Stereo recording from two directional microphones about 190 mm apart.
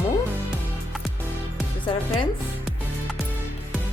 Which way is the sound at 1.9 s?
25° left (ahead or behind).